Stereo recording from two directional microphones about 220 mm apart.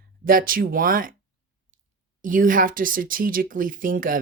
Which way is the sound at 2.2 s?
40° right (ahead or behind).